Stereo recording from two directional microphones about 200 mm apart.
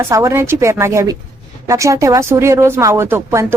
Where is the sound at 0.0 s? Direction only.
15° right (ahead or behind).